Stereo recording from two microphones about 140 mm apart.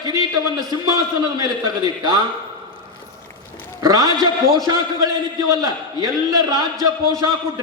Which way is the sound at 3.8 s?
25° right (ahead or behind).